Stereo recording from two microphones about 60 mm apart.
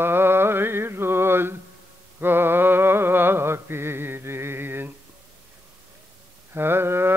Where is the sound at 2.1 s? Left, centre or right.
Right.